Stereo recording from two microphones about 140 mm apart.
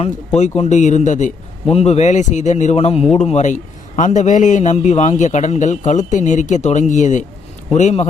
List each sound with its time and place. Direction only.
0.3 s a man's voice: 50° left (ahead or behind)